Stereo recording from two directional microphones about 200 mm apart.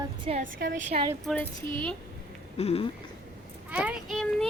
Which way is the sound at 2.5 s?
30° left (ahead or behind).